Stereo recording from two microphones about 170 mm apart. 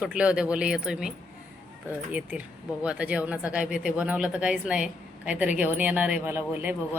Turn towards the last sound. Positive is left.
turn(degrees=-10)  # may be behind; listen again after turning